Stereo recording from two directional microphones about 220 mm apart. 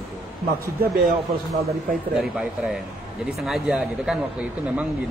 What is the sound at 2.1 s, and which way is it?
Speech, centre (ahead or behind).